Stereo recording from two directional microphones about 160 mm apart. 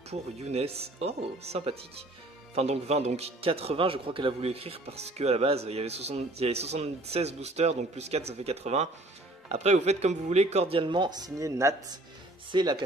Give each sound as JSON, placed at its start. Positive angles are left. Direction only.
{"t": 0.1, "sound": "speech", "side_deg": -40}